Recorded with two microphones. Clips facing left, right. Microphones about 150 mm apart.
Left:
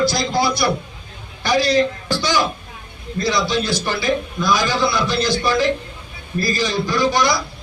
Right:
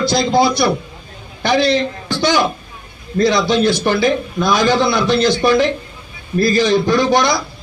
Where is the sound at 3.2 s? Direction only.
20° right (ahead or behind).